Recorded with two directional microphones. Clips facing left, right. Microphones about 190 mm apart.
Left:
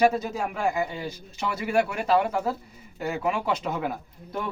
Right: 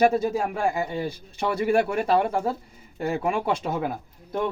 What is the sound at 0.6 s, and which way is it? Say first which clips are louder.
Speech: right 2 dB; 50° right (ahead or behind).